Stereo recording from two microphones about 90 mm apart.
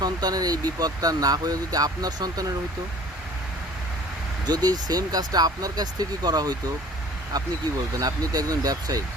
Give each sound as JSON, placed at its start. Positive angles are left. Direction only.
{"t": 0.0, "sound": "speech", "side_deg": -45}
{"t": 4.4, "sound": "speech", "side_deg": -50}
{"t": 7.9, "sound": "speech", "side_deg": -40}